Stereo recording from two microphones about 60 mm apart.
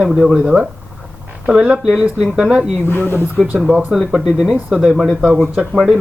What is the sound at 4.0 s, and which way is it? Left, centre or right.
Speech, centre.